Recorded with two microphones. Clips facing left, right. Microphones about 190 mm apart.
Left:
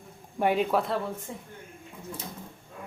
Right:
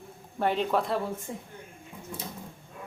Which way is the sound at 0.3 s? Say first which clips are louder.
Left 2 dB; 10° left (ahead or behind).